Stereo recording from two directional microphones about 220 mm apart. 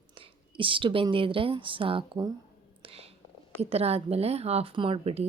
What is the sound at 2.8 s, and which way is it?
Whispering, 25° right (ahead or behind).